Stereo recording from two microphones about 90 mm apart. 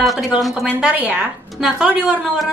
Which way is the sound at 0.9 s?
15° right (ahead or behind).